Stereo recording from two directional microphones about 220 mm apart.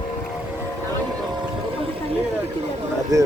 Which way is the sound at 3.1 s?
15° right (ahead or behind).